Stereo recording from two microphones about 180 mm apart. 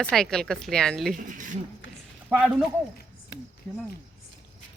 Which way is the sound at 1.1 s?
45° right (ahead or behind).